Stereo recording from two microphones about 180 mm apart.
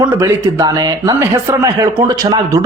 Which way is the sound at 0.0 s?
15° right (ahead or behind).